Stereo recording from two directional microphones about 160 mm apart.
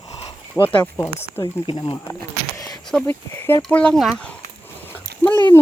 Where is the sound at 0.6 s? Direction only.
5° left (ahead or behind).